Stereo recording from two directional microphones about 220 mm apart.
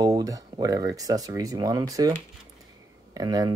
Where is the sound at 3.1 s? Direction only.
15° right (ahead or behind).